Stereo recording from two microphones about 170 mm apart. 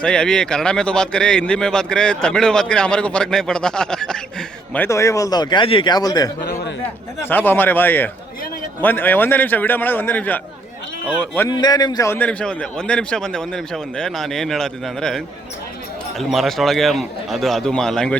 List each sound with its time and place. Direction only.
0.0 s speech: 5° left (ahead or behind); by 6.3 s 20° left (ahead or behind)
7.2 s a man's voice: 10° left (ahead or behind)
11.3 s speech: 25° left (ahead or behind); by 18.2 s 5° left (ahead or behind)